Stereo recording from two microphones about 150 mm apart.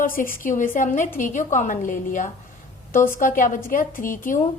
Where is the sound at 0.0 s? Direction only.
65° left (ahead or behind).